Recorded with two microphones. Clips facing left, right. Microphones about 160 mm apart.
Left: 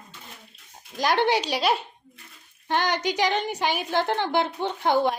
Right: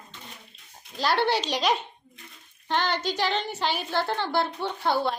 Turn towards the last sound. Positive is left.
turn(degrees=15)  # may be behind; listen again after turning